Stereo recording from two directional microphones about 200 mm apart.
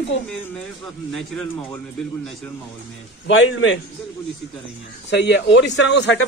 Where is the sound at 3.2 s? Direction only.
70° left (ahead or behind).